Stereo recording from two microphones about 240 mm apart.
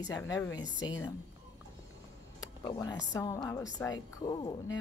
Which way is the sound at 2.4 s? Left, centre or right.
Centre.